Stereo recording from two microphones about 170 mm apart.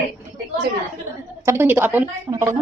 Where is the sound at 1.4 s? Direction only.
15° right (ahead or behind).